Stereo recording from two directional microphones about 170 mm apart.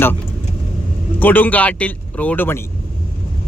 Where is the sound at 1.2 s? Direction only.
10° left (ahead or behind).